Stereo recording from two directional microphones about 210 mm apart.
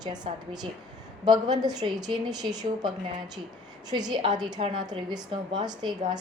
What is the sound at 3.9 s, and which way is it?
A woman's voice, 20° right (ahead or behind).